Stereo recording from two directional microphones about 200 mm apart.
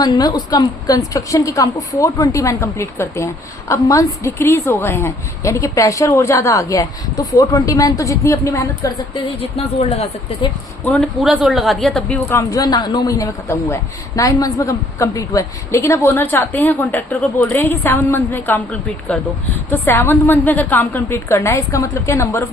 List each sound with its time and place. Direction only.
0.0 s a woman's voice: 20° left (ahead or behind)
9.9 s speech: 30° left (ahead or behind)
10.8 s a woman's voice: 5° left (ahead or behind)